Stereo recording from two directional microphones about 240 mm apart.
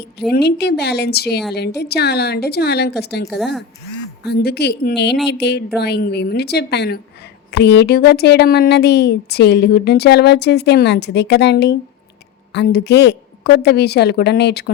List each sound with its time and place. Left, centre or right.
0.3 s speech: left
3.2 s a woman's voice: centre
4.2 s speech: left